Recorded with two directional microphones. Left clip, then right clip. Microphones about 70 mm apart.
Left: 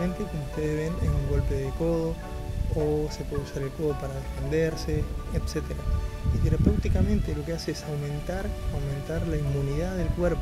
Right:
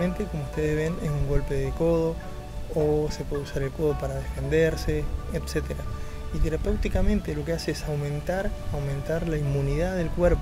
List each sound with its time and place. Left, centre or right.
0.6 s speech: right